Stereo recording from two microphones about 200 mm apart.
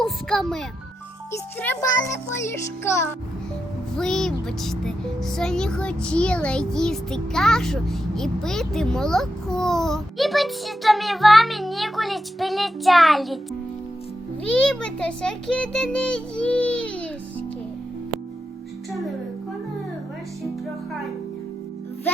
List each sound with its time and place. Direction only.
0.0 s speech: centre (ahead or behind)
1.6 s a child's voice: 15° left (ahead or behind)
18.9 s music: centre (ahead or behind)